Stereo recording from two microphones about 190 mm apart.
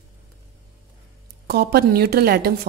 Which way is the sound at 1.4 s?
55° right (ahead or behind).